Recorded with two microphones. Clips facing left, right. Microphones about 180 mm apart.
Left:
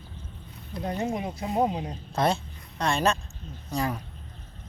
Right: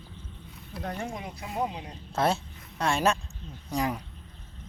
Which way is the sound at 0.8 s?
20° left (ahead or behind).